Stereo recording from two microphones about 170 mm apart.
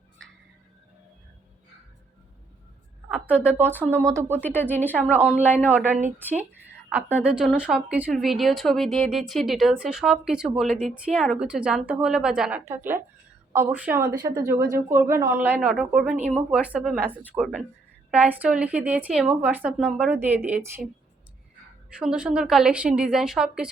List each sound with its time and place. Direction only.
4.1 s a woman's voice: 15° right (ahead or behind)
4.4 s speech: 10° left (ahead or behind)
5.1 s a woman's voice: 5° right (ahead or behind)
21.9 s speech: 5° right (ahead or behind)